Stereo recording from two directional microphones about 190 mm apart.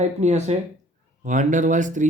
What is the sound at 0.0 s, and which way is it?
Speech, 35° right (ahead or behind).